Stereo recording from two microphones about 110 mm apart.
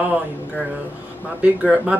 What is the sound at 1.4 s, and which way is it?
Speech, 10° right (ahead or behind).